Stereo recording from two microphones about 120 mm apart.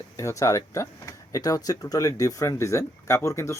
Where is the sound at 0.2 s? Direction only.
25° left (ahead or behind).